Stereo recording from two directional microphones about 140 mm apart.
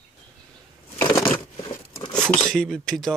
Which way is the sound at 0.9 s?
20° left (ahead or behind).